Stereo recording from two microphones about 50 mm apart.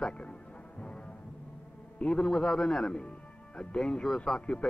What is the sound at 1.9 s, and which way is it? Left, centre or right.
Speech, centre.